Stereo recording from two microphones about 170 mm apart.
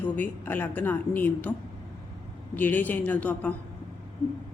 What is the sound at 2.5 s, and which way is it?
A woman's voice, 10° left (ahead or behind).